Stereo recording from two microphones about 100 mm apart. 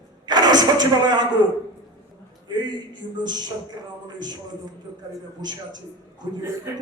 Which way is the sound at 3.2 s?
45° right (ahead or behind).